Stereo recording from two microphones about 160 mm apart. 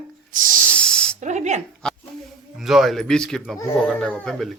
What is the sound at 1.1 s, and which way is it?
Speech, 50° right (ahead or behind).